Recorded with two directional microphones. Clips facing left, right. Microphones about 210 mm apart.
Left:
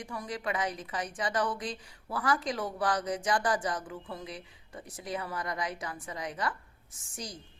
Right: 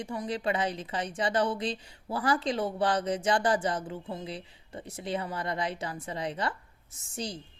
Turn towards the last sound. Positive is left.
turn(degrees=-25)  # may be behind; listen again after turning